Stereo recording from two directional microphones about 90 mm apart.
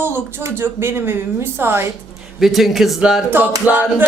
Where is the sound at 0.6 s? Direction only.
25° right (ahead or behind).